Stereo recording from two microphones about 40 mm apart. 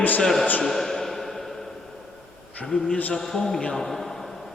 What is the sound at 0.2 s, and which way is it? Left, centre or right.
Speech, centre.